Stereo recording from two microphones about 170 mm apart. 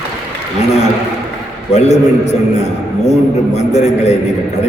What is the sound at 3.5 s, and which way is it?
Speech, 40° left (ahead or behind).